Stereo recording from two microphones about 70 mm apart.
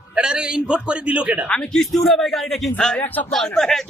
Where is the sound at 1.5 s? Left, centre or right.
Centre.